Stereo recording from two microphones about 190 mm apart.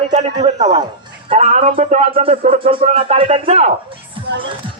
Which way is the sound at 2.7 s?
30° right (ahead or behind).